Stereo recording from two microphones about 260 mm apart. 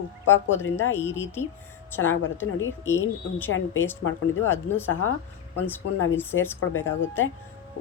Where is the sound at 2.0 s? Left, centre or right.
Left.